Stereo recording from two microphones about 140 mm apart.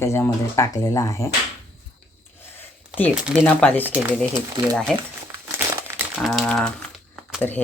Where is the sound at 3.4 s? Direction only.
10° left (ahead or behind).